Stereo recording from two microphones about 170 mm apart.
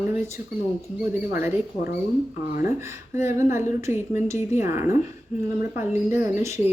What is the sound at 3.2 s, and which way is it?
Speech, 15° right (ahead or behind).